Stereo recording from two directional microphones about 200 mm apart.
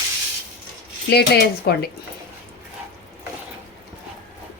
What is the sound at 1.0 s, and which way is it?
Speech, 55° left (ahead or behind).